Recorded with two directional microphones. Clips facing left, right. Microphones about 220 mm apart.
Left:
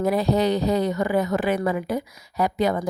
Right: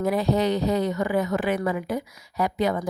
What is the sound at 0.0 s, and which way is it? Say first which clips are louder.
A woman's voice: left 2 dB; 35° left (ahead or behind).